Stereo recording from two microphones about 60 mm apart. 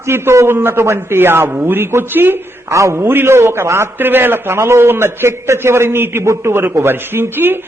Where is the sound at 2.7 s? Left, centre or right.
Right.